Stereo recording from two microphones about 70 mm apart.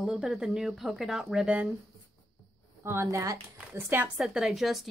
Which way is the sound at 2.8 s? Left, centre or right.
Right.